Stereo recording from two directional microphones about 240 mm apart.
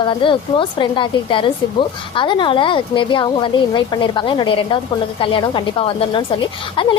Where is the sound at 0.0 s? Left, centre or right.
Centre.